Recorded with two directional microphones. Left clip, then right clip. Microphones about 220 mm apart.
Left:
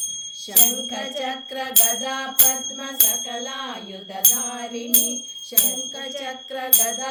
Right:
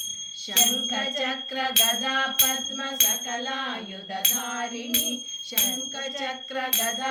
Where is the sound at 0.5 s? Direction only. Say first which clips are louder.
Right 1 dB; 60° left (ahead or behind).